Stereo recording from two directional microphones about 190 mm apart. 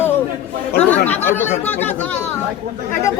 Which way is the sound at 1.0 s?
10° left (ahead or behind).